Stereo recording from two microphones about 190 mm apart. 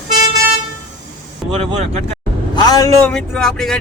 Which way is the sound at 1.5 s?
35° right (ahead or behind).